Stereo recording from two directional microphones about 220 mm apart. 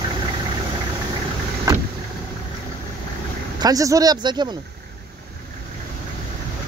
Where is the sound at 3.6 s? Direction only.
15° right (ahead or behind).